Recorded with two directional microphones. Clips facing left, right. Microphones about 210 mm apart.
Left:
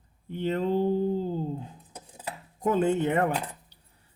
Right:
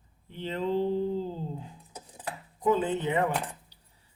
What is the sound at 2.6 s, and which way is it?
Speech, 50° left (ahead or behind).